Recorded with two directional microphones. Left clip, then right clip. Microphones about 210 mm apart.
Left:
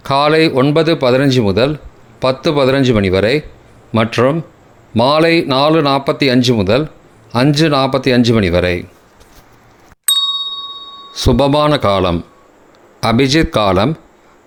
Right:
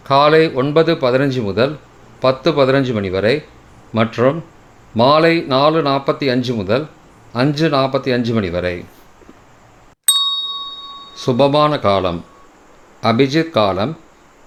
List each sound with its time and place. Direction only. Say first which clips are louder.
0.0 s speech: even; 30° left (ahead or behind)
10.1 s ding: left 2 dB; centre (ahead or behind)
11.1 s speech: left 1 dB; 30° left (ahead or behind)